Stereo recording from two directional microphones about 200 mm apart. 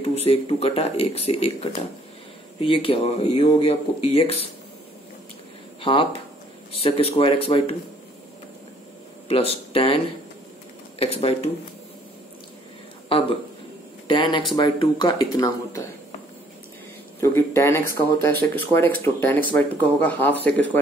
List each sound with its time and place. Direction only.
0.1 s speech: 30° left (ahead or behind)
5.8 s speech: 25° left (ahead or behind)
9.3 s speech: 30° left (ahead or behind)
11.0 s speech: 30° left (ahead or behind)
14.0 s speech: 25° left (ahead or behind)
17.2 s speech: 10° left (ahead or behind)